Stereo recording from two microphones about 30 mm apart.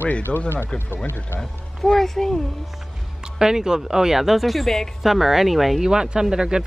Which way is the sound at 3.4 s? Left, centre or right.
Right.